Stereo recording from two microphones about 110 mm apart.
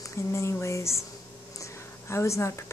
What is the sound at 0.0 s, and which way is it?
A woman's voice, 25° left (ahead or behind).